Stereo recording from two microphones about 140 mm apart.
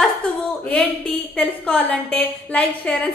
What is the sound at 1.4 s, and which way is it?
A woman's voice, 10° left (ahead or behind).